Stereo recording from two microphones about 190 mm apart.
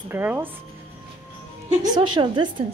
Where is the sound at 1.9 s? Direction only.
25° right (ahead or behind).